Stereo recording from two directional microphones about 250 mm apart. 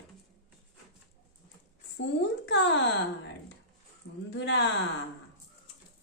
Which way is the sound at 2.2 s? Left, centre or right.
Left.